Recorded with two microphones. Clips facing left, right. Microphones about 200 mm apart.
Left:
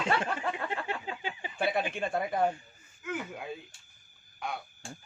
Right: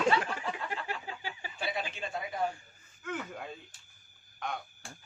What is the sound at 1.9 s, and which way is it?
Speech, 55° left (ahead or behind).